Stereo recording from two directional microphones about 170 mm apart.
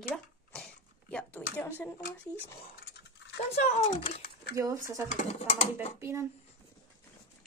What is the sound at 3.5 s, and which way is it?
Speech, 40° left (ahead or behind).